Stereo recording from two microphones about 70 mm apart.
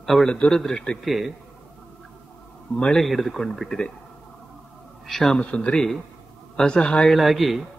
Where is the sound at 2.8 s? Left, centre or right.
Centre.